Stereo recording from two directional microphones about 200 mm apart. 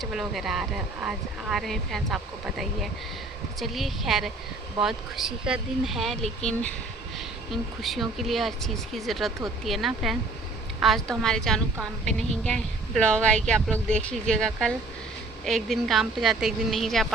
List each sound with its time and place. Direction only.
0.0 s speech: centre (ahead or behind)